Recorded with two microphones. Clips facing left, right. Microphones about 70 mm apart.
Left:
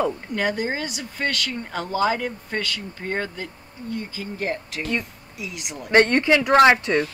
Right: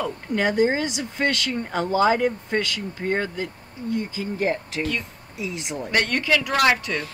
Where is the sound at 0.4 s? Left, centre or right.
Right.